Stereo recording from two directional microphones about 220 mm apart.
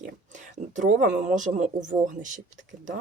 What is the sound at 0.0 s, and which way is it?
Speech, 35° right (ahead or behind).